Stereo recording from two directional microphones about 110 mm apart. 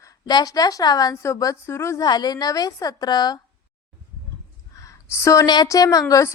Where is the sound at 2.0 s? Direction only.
40° left (ahead or behind).